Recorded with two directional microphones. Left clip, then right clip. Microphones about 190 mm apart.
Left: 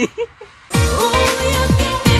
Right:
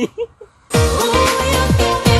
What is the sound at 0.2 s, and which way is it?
Music, 15° right (ahead or behind).